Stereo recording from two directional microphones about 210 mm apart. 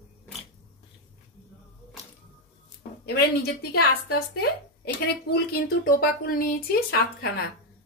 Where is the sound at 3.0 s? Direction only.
50° left (ahead or behind).